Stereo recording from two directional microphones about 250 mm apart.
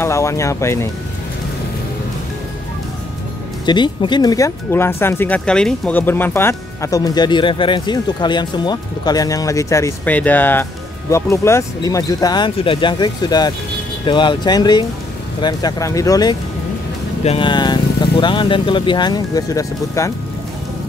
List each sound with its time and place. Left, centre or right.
0.0 s speech: centre
3.6 s speech: centre